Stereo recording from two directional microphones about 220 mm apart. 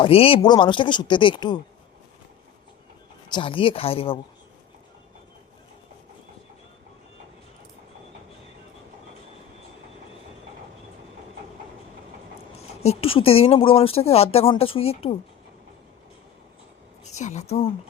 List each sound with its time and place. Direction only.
0.0 s speech: 25° left (ahead or behind)
3.3 s speech: 25° left (ahead or behind)
12.5 s speech: 30° left (ahead or behind)
17.1 s a woman's voice: 30° left (ahead or behind)